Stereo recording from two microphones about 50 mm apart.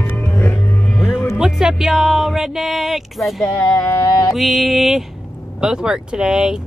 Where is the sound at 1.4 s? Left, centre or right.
Centre.